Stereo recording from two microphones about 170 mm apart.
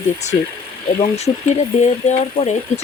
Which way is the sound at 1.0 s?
40° left (ahead or behind).